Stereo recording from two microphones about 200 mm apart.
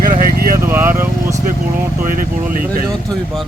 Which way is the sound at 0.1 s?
45° right (ahead or behind).